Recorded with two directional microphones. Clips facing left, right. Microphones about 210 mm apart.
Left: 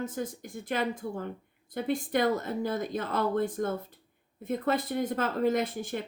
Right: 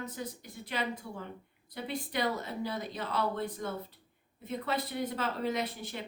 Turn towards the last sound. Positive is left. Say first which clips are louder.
# left 6 dB
turn(degrees=50)  # may be behind; listen again after turning